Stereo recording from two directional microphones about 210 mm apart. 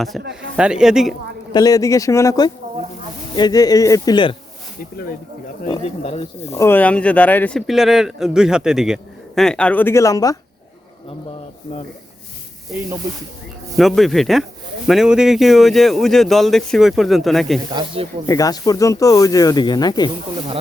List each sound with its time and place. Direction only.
0.1 s speech: centre (ahead or behind)
1.5 s speech: 15° left (ahead or behind)
5.6 s speech: 30° left (ahead or behind)
6.6 s speech: 10° left (ahead or behind)
13.7 s speech: centre (ahead or behind)
17.7 s speech: 20° right (ahead or behind)
18.3 s speech: 15° left (ahead or behind)